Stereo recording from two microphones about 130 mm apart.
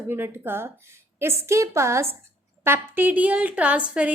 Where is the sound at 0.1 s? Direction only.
15° right (ahead or behind).